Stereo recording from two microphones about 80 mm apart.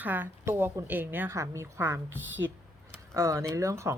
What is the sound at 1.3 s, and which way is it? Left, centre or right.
Speech, right.